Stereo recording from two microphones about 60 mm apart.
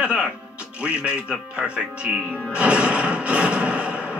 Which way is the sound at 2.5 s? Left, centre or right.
Centre.